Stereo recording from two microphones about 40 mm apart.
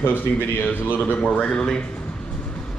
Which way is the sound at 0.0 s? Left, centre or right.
Left.